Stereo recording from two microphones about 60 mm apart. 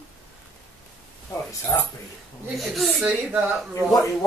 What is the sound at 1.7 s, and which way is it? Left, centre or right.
Speech, left.